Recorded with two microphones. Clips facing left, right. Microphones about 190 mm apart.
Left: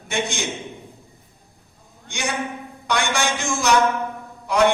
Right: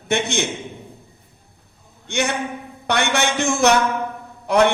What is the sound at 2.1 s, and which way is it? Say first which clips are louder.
A woman's voice: right 4 dB; 60° right (ahead or behind).